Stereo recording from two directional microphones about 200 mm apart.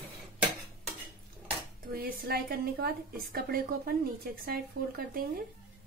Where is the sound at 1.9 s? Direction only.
50° right (ahead or behind).